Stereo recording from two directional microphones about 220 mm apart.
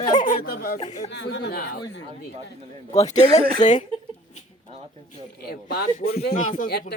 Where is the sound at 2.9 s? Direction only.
30° left (ahead or behind).